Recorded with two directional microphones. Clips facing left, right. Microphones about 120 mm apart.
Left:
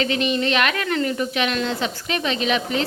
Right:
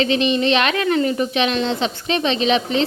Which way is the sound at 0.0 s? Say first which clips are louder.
Right 4 dB; 20° right (ahead or behind).